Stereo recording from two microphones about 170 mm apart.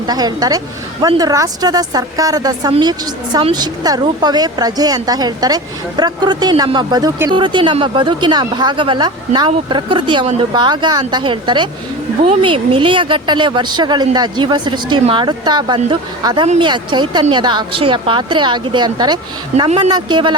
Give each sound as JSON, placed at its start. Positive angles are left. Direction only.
{"t": 0.1, "sound": "speech", "side_deg": -25}